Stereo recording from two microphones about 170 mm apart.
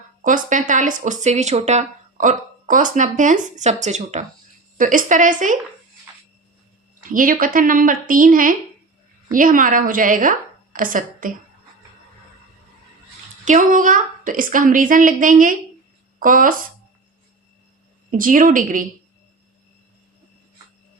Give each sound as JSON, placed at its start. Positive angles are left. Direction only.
{"t": 0.2, "sound": "speech", "side_deg": -50}
{"t": 7.1, "sound": "a woman's voice", "side_deg": -55}
{"t": 13.4, "sound": "speech", "side_deg": -50}
{"t": 18.1, "sound": "speech", "side_deg": -50}